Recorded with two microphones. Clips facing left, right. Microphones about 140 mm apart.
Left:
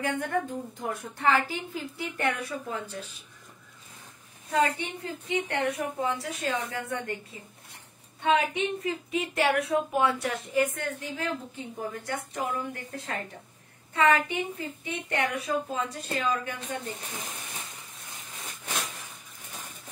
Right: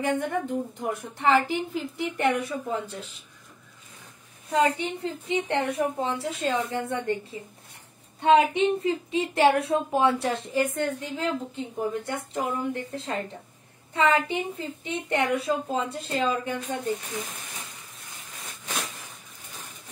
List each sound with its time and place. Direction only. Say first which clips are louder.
0.0 s a woman's voice: right 2 dB; 20° right (ahead or behind)
4.5 s a woman's voice: right 3 dB; 25° right (ahead or behind)
8.2 s a woman's voice: right 6 dB; 30° right (ahead or behind)